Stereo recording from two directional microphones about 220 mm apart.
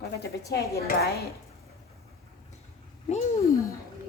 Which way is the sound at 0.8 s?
45° left (ahead or behind).